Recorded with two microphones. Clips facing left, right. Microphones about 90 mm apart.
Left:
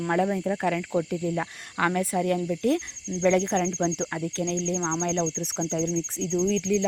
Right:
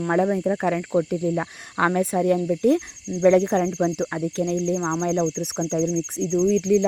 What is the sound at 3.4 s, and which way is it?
Speech, 40° right (ahead or behind).